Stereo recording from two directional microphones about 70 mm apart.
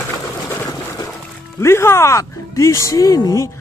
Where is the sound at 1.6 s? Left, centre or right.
Left.